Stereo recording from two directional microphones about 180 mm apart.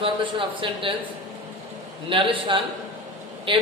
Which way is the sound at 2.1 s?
30° right (ahead or behind).